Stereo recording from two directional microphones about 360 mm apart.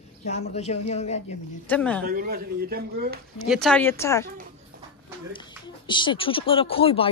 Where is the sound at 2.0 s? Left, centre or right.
Right.